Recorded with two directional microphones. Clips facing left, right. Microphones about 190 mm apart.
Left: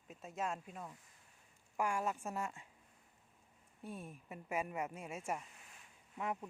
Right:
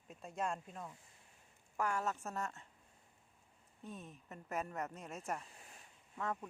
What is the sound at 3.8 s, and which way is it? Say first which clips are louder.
Speech: left 2 dB; 10° left (ahead or behind).